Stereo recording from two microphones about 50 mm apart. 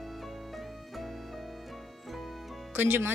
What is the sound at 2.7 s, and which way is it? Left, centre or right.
Speech, right.